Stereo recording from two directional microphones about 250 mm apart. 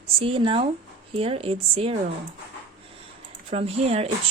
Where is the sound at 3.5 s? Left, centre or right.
Right.